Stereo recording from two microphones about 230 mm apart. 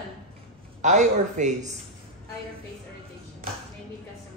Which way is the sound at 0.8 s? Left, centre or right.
Right.